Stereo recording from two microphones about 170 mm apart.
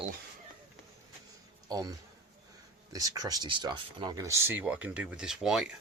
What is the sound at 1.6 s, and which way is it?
Speech, 20° right (ahead or behind).